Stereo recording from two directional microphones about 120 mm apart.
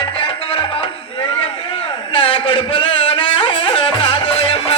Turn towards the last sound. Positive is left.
turn(degrees=55)  # may be behind; listen again after turning